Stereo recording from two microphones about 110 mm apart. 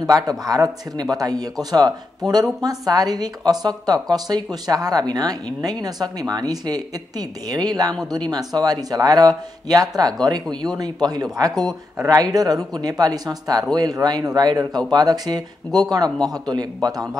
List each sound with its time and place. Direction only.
0.0 s a woman's voice: 35° right (ahead or behind)